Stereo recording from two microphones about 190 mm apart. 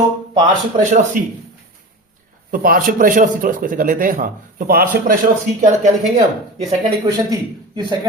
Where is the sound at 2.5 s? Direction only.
50° right (ahead or behind).